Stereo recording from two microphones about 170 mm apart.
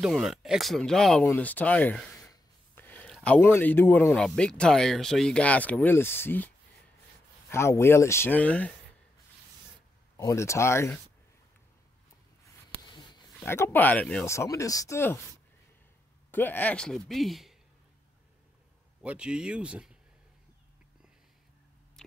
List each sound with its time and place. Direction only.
0.0 s speech: centre (ahead or behind)
10.1 s speech: 15° left (ahead or behind)
12.9 s a sound: 25° left (ahead or behind)
13.4 s speech: 15° left (ahead or behind)
16.3 s a man's voice: 10° left (ahead or behind)
18.9 s a man's voice: 5° right (ahead or behind)